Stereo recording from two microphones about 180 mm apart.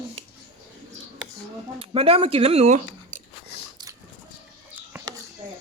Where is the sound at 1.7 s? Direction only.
30° right (ahead or behind).